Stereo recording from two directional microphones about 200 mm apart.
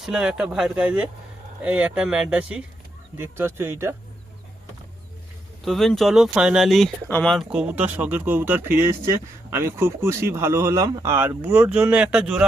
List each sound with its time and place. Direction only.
0.0 s speech: centre (ahead or behind)
5.6 s speech: centre (ahead or behind)